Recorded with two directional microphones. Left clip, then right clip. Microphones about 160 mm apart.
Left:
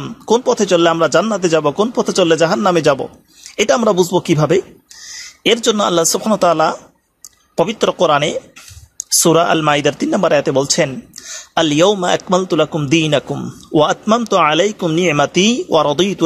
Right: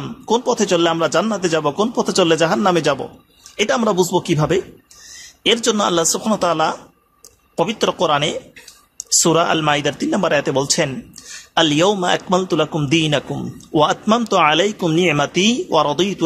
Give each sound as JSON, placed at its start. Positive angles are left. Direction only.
{"t": 0.0, "sound": "speech", "side_deg": 25}